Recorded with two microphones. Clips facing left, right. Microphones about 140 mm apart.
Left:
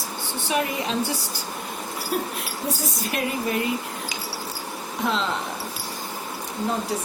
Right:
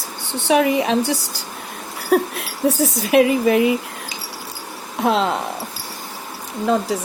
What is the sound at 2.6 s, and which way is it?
Speech, 90° right.